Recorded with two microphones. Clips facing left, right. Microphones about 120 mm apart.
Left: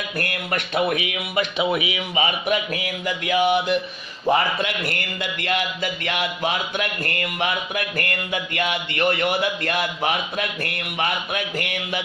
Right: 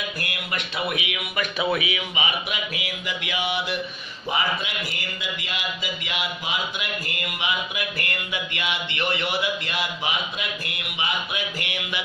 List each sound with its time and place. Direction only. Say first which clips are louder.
0.2 s speech: left 5 dB; 50° left (ahead or behind); by 2.0 s 20° left (ahead or behind)
2.1 s speech: left 10 dB; 45° left (ahead or behind)
4.3 s speech: left 6 dB; 55° left (ahead or behind)